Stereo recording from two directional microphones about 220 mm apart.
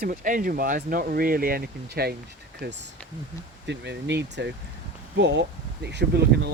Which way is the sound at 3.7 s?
50° right (ahead or behind).